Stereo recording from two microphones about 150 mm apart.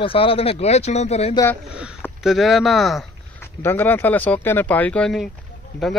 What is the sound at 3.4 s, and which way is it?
Speech, 15° left (ahead or behind).